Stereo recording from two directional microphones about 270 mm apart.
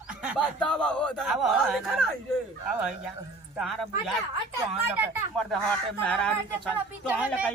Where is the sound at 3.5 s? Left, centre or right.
Centre.